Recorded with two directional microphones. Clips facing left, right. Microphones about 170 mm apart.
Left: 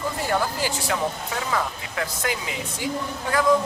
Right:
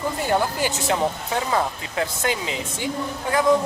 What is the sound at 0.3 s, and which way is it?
Speech, 20° right (ahead or behind).